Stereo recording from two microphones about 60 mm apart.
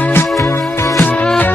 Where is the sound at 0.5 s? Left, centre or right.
Left.